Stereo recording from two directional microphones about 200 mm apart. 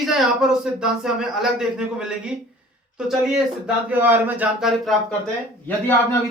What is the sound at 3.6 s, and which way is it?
Speech, 10° right (ahead or behind).